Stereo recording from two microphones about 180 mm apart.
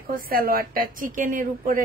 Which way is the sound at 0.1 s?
55° right (ahead or behind).